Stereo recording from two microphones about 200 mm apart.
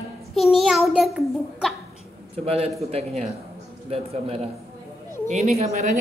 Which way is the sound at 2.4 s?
30° right (ahead or behind).